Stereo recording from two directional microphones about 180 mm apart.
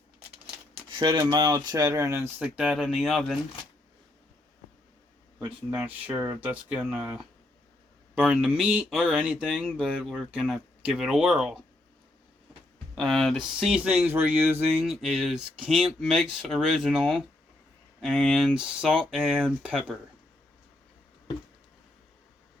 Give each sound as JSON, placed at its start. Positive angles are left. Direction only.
{"t": 0.7, "sound": "speech", "side_deg": -25}
{"t": 5.5, "sound": "speech", "side_deg": -10}
{"t": 13.0, "sound": "speech", "side_deg": 0}